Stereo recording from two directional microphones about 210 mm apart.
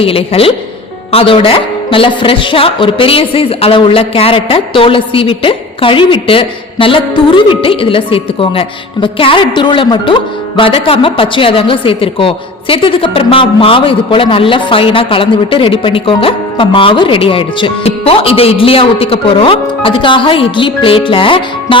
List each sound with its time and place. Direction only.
0.0 s a woman's voice: 25° left (ahead or behind)